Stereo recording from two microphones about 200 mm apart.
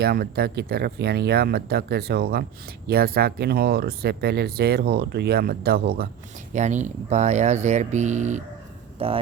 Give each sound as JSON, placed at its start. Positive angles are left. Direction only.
{"t": 0.0, "sound": "speech", "side_deg": -50}
{"t": 6.5, "sound": "speech", "side_deg": -35}